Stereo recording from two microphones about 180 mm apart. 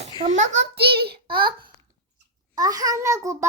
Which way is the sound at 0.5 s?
65° right (ahead or behind).